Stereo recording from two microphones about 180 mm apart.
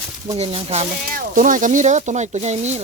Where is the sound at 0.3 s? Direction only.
35° right (ahead or behind).